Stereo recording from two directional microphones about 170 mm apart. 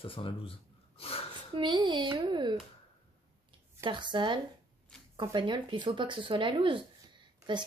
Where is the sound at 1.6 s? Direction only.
25° right (ahead or behind).